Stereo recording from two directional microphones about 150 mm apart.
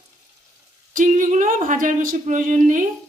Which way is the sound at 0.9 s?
60° right (ahead or behind).